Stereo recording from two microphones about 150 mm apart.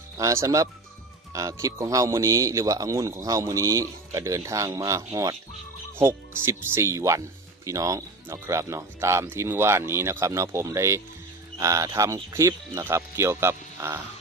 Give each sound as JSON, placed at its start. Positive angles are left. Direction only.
{"t": 0.2, "sound": "a man's voice", "side_deg": -20}